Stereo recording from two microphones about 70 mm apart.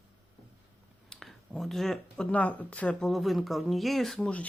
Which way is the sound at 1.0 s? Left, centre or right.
Centre.